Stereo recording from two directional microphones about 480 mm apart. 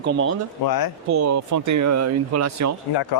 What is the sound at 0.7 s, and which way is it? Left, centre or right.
Speech, left.